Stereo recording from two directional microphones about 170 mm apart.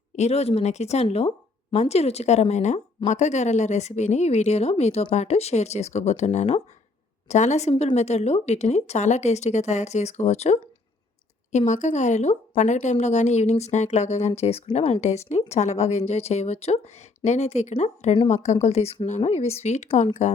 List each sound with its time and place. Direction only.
0.2 s speech: 40° left (ahead or behind)